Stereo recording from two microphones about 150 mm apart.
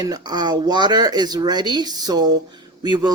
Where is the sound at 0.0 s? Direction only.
25° right (ahead or behind).